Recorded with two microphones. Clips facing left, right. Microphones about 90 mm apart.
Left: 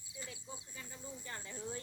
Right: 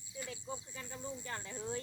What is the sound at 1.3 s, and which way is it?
Speech, 35° right (ahead or behind).